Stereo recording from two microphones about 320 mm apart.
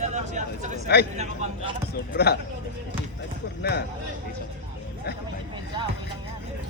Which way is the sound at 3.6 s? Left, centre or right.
Left.